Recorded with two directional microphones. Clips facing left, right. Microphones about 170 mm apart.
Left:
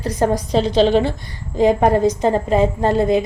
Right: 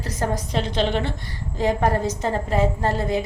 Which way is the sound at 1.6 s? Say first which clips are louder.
Left 7 dB; 20° left (ahead or behind).